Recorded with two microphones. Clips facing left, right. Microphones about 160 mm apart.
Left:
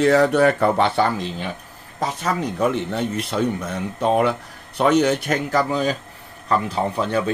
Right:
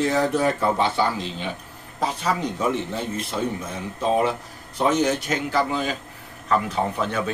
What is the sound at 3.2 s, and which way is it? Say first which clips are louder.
A man's voice: left 4 dB; 70° left (ahead or behind).